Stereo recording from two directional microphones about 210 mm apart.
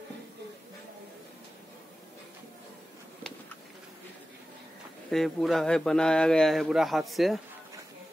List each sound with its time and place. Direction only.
5.1 s a man's voice: centre (ahead or behind)